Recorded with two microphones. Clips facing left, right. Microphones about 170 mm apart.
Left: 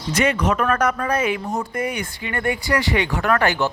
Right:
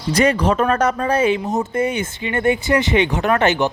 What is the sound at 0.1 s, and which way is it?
Speech, 35° right (ahead or behind).